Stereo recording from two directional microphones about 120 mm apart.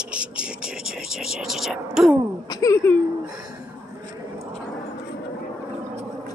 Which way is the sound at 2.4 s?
35° left (ahead or behind).